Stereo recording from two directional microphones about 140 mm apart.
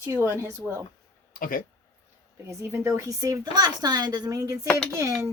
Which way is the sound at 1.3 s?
90° left.